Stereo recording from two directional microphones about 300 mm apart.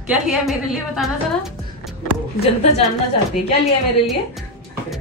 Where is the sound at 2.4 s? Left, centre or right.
Left.